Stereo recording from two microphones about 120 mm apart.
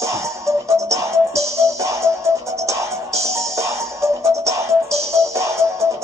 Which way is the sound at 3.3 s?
25° right (ahead or behind).